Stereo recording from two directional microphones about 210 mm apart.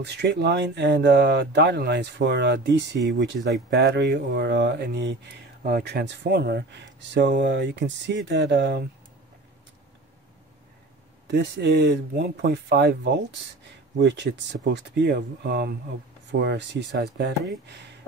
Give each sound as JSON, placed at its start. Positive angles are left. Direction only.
{"t": 0.0, "sound": "speech", "side_deg": -55}
{"t": 11.2, "sound": "speech", "side_deg": -55}